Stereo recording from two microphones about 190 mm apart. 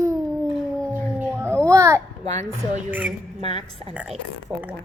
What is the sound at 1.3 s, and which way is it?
Children playing, 15° right (ahead or behind).